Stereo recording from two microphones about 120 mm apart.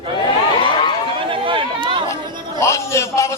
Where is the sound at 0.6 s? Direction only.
45° left (ahead or behind).